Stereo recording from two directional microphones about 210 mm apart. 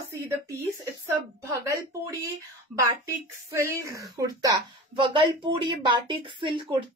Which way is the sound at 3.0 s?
10° right (ahead or behind).